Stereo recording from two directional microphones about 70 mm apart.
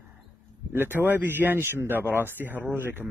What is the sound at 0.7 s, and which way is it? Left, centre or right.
Speech, right.